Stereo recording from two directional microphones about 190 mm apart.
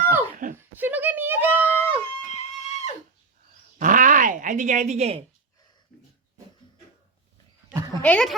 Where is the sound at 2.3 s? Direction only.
35° left (ahead or behind).